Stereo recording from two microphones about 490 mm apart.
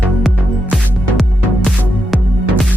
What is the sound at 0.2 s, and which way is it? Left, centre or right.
Music, centre.